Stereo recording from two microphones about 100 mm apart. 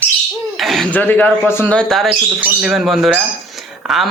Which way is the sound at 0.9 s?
20° left (ahead or behind).